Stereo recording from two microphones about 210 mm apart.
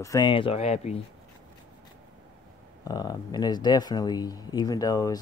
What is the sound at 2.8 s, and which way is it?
Speech, 20° left (ahead or behind).